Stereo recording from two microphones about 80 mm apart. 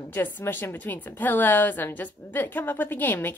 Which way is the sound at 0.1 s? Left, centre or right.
Left.